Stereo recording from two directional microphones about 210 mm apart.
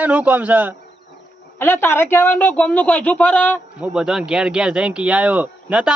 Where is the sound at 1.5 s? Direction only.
10° left (ahead or behind).